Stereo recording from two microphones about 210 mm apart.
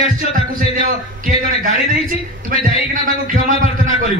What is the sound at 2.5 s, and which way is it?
A man's voice, 40° right (ahead or behind).